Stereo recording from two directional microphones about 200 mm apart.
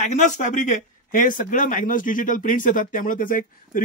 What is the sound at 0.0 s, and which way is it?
Speech, 35° left (ahead or behind).